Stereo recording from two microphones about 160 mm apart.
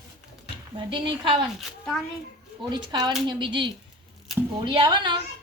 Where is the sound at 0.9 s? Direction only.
30° right (ahead or behind).